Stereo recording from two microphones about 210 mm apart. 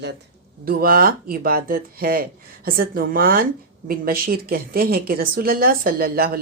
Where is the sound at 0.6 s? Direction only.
45° right (ahead or behind).